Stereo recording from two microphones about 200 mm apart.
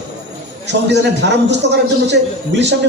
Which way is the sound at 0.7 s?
60° right (ahead or behind).